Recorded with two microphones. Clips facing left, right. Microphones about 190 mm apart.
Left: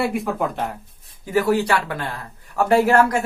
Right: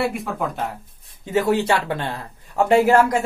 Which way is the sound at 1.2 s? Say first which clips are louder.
Even; 25° right (ahead or behind).